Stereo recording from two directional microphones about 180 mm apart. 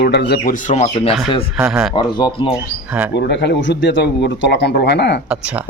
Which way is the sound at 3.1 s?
70° left (ahead or behind).